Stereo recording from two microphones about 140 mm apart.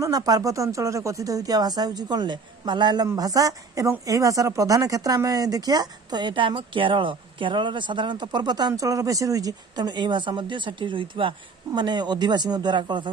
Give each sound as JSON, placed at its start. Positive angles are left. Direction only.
{"t": 0.0, "sound": "speech", "side_deg": -25}